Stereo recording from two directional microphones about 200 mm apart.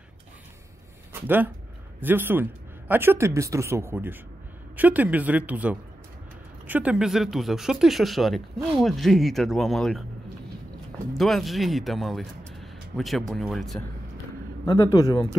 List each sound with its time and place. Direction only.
1.2 s speech: 10° right (ahead or behind)
11.1 s speech: centre (ahead or behind)
14.7 s a man's voice: 20° left (ahead or behind)